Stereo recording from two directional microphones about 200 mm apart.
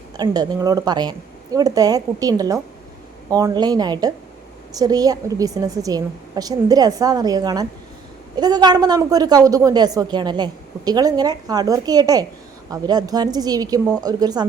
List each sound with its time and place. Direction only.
0.2 s a woman's voice: 20° right (ahead or behind)